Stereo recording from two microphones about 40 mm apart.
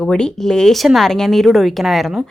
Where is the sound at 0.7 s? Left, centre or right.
Centre.